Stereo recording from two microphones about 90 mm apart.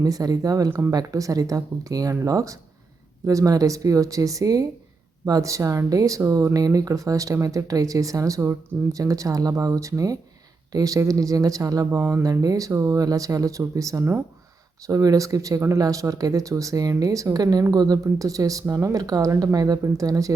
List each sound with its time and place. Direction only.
0.0 s speech: 45° right (ahead or behind)
0.7 s speech: 30° right (ahead or behind)
0.9 s speech: 40° right (ahead or behind)